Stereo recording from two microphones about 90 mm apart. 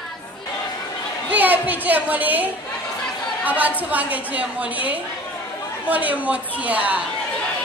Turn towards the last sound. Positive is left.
turn(degrees=-15)  # may be behind; listen again after turning